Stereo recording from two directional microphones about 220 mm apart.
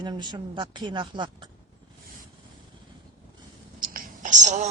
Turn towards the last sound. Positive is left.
turn(degrees=-35)  # may be behind; listen again after turning